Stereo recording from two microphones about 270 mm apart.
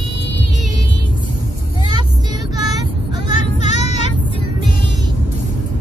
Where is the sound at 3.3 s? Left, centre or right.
Left.